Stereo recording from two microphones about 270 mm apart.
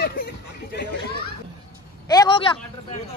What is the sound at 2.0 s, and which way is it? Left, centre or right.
Speech, centre.